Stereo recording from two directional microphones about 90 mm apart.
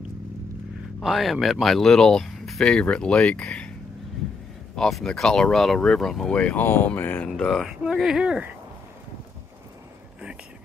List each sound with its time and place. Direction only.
1.0 s speech: centre (ahead or behind)
4.7 s speech: 5° left (ahead or behind)
6.6 s speech: 25° left (ahead or behind)
7.2 s speech: 5° left (ahead or behind)